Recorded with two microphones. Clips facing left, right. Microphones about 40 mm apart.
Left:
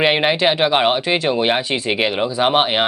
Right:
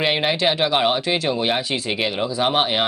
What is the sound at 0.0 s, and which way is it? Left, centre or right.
Speech, centre.